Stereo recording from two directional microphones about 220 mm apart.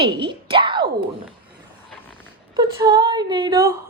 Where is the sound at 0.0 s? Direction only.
20° right (ahead or behind).